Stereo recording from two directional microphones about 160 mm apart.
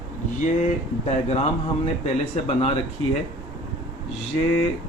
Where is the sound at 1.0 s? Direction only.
40° left (ahead or behind).